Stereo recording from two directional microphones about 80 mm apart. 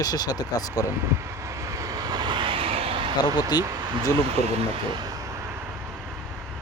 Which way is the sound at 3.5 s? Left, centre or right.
Left.